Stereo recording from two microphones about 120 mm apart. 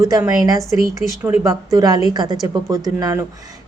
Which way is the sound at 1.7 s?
30° right (ahead or behind).